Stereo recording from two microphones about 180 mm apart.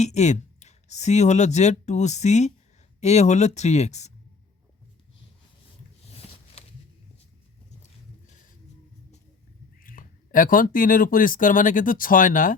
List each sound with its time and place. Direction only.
0.0 s speech: 40° left (ahead or behind)
9.8 s speech: 50° left (ahead or behind)